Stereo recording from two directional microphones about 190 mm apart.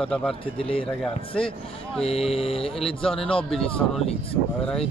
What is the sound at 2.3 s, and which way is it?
Speech, 30° left (ahead or behind).